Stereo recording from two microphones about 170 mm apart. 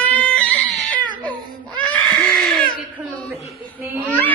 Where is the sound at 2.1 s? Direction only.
5° left (ahead or behind).